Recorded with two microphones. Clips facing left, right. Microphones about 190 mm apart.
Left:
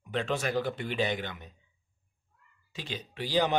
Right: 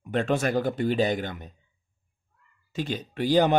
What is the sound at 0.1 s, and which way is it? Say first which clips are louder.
Speech: right 6 dB; 50° right (ahead or behind).